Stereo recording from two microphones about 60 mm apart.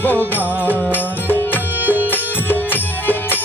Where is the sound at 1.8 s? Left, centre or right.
Right.